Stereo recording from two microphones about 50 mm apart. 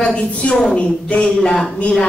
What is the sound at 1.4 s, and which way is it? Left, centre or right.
Speech, centre.